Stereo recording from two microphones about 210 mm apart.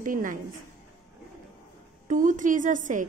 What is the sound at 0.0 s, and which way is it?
Speech, 40° right (ahead or behind).